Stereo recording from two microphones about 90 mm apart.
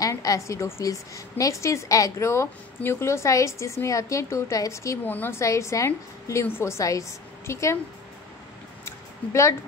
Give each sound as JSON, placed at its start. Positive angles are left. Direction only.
{"t": 0.0, "sound": "a woman's voice", "side_deg": 40}
{"t": 5.0, "sound": "a woman's voice", "side_deg": 20}
{"t": 8.8, "sound": "a sound", "side_deg": 35}